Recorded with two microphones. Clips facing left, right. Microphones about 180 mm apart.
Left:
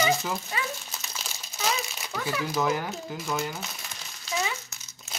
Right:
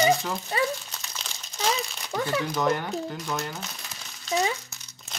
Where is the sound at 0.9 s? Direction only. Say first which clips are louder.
Left 1 dB; 5° left (ahead or behind).